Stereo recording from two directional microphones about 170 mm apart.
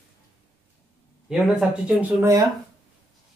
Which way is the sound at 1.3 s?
5° right (ahead or behind).